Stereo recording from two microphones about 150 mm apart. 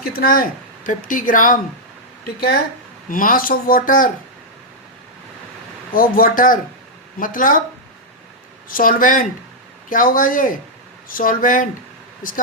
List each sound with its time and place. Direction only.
0.0 s a woman's voice: 80° left
0.9 s a woman's voice: 65° left (ahead or behind)
3.1 s a woman's voice: 65° left (ahead or behind)
5.9 s a woman's voice: 70° left (ahead or behind)
8.7 s a woman's voice: 65° left (ahead or behind)